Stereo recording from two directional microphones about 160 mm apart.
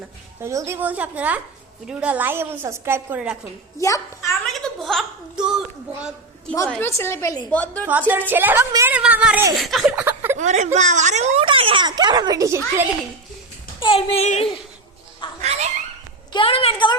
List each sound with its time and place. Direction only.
0.4 s a woman's voice: 20° right (ahead or behind)
3.8 s a child's voice: 20° left (ahead or behind)
4.4 s a woman's voice: centre (ahead or behind)
6.5 s a woman's voice: 10° left (ahead or behind)
7.5 s a woman's voice: 10° left (ahead or behind)
7.9 s a woman's voice: 10° right (ahead or behind)
10.0 s a sound: 15° right (ahead or behind)
10.3 s speech: 50° right (ahead or behind)
11.4 s speech: 35° right (ahead or behind)
13.7 s speech: 35° left (ahead or behind)
15.4 s cat: 45° right (ahead or behind)
16.3 s speech: 35° left (ahead or behind)